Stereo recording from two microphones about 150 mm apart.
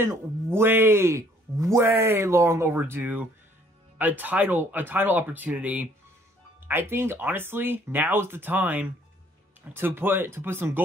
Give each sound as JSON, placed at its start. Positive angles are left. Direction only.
{"t": 0.0, "sound": "speech", "side_deg": -15}